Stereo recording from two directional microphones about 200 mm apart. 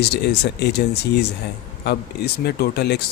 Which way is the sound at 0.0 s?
55° left (ahead or behind).